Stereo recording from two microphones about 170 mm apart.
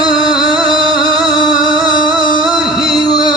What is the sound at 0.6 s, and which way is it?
Music, 30° right (ahead or behind).